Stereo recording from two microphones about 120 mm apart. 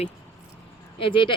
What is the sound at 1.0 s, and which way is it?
Speech, 45° left (ahead or behind).